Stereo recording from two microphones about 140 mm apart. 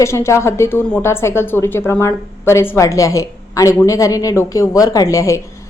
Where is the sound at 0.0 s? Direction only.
20° left (ahead or behind).